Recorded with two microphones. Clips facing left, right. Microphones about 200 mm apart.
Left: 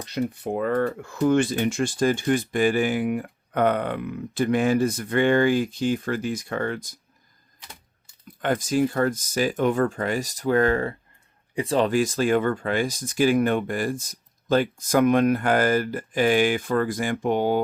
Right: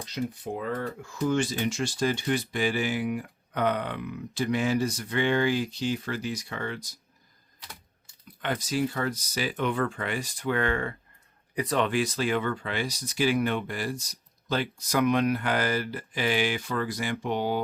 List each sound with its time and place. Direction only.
0.0 s speech: 60° left (ahead or behind)
8.4 s speech: 50° left (ahead or behind)
11.5 s speech: 30° left (ahead or behind)
11.9 s speech: 45° left (ahead or behind)